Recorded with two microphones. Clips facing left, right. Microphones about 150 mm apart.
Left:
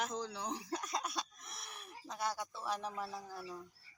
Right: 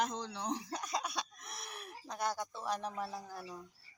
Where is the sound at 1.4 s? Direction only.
70° right (ahead or behind).